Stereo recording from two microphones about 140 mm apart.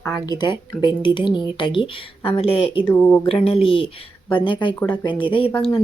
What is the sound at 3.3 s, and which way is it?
Speech, 45° left (ahead or behind).